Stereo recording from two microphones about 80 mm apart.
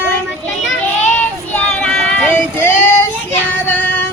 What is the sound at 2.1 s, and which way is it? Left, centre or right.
Child singing, left.